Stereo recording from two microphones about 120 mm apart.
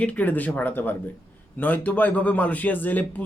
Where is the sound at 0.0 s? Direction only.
10° left (ahead or behind).